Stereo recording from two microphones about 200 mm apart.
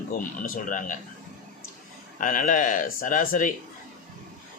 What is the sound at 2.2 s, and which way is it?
Speech, 40° left (ahead or behind).